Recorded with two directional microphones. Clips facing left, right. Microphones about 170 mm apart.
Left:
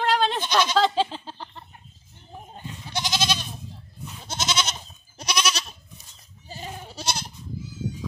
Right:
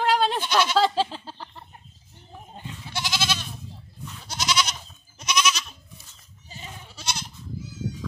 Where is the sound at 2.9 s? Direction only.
20° left (ahead or behind); by 7.3 s 35° left (ahead or behind).